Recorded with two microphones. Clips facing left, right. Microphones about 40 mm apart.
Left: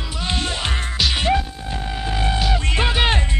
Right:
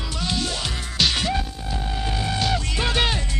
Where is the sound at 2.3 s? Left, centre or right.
Centre.